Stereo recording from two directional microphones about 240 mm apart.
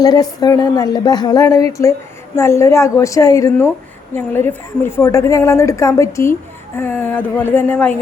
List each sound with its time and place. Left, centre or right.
0.0 s a woman's voice: centre